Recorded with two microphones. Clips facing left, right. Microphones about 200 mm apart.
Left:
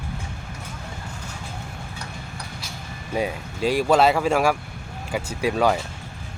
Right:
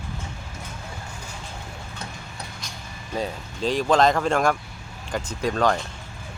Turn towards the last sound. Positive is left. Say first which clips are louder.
# left 2 dB
turn(degrees=10)  # may be behind; listen again after turning